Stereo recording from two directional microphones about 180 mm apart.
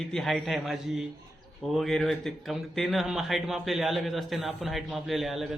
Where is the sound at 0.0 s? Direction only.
Centre (ahead or behind).